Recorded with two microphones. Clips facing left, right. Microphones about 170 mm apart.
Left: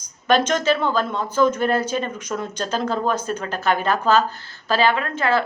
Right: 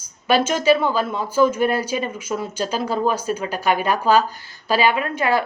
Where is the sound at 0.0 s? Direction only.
10° right (ahead or behind).